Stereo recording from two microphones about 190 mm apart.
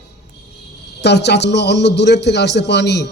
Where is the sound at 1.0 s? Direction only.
60° left (ahead or behind).